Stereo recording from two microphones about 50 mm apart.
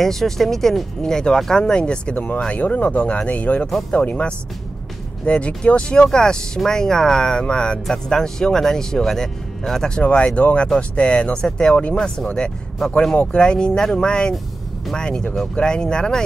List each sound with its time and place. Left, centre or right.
0.0 s speech: centre; by 12.1 s left
12.3 s speech: centre